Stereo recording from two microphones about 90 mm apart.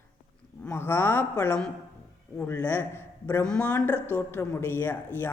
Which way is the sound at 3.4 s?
10° left (ahead or behind).